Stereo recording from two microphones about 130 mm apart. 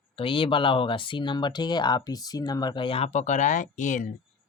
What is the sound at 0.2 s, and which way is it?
Speech, 45° left (ahead or behind).